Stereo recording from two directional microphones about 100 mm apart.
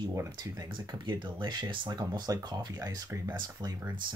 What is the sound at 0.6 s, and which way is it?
Speech, 50° right (ahead or behind).